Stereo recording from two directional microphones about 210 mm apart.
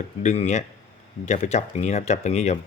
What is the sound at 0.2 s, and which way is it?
Speech, 35° left (ahead or behind).